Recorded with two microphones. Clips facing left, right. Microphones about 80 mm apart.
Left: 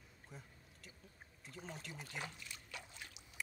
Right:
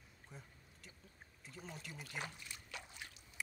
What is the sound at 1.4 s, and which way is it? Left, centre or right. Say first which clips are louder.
Pour: left 1 dB; centre.